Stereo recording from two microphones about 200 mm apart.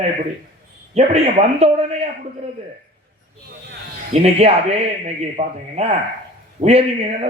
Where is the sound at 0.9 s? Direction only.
30° right (ahead or behind).